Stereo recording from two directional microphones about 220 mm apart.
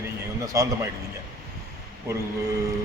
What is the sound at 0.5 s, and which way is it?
Speech, 15° right (ahead or behind).